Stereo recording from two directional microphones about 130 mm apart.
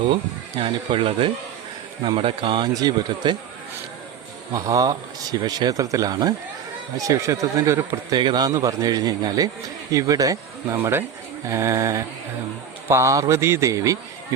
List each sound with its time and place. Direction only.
0.6 s a man's voice: 45° right (ahead or behind)
4.5 s a man's voice: 25° right (ahead or behind)
8.1 s a man's voice: 30° right (ahead or behind)